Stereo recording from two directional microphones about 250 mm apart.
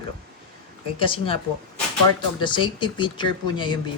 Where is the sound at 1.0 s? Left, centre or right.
Left.